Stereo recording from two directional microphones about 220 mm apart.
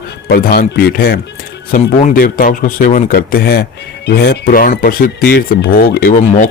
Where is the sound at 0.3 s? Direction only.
40° left (ahead or behind).